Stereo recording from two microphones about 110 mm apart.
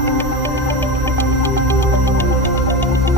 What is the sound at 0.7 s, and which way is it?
Music, 20° left (ahead or behind).